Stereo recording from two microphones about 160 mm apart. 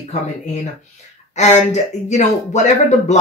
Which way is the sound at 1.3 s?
45° left (ahead or behind).